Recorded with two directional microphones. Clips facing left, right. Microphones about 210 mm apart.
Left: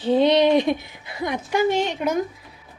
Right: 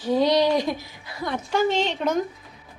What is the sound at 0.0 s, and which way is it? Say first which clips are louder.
A woman's voice: left 3 dB; 25° left (ahead or behind).